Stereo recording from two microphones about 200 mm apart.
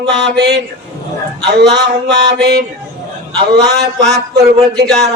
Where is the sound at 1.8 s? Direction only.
60° right (ahead or behind).